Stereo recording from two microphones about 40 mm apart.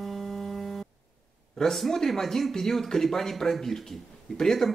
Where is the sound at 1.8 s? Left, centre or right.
Centre.